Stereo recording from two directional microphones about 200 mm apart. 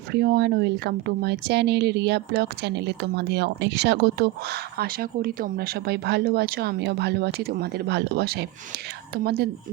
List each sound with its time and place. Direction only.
0.1 s speech: 55° right (ahead or behind)